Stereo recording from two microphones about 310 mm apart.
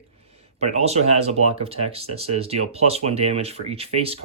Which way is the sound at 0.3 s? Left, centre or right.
Centre.